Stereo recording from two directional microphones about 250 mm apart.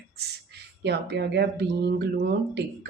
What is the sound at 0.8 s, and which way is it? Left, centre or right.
Speech, right.